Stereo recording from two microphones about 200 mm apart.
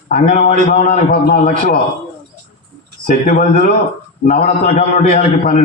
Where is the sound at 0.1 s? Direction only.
45° left (ahead or behind).